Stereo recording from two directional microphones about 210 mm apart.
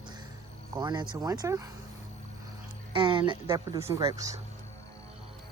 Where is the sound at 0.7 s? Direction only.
20° right (ahead or behind).